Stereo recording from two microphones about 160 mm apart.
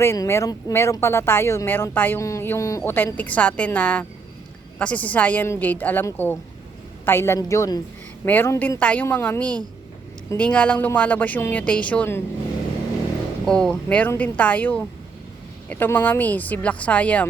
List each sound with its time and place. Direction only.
0.0 s a woman's voice: 15° left (ahead or behind)
13.4 s speech: 5° left (ahead or behind)